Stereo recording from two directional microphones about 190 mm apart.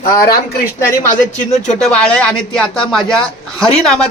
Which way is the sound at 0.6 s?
45° left (ahead or behind).